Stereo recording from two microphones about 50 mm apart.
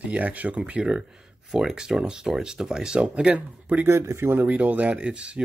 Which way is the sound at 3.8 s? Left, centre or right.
Right.